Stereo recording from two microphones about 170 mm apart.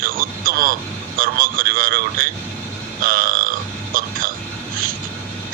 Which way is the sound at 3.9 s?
55° right (ahead or behind).